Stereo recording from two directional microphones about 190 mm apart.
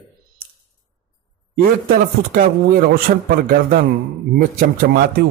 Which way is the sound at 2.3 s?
50° right (ahead or behind).